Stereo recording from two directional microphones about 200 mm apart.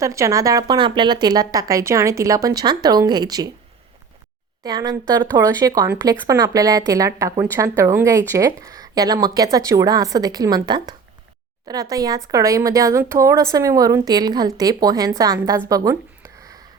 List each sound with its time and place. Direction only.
0.0 s speech: 15° right (ahead or behind)
4.6 s a woman's voice: 20° right (ahead or behind)